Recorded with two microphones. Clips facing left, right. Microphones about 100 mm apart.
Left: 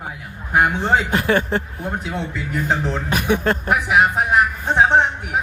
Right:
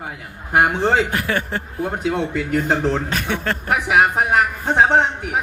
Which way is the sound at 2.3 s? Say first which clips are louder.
Right 5 dB; 65° right (ahead or behind).